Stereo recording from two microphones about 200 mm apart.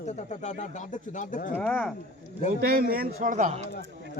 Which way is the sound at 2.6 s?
45° right (ahead or behind).